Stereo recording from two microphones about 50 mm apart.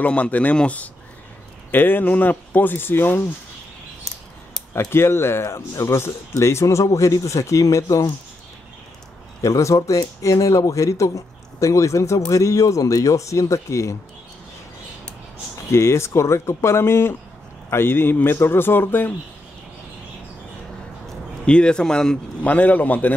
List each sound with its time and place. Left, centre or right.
0.0 s speech: left
1.7 s speech: left
4.7 s speech: left
9.4 s speech: left
15.7 s a man's voice: left
21.5 s a man's voice: centre
22.4 s speech: left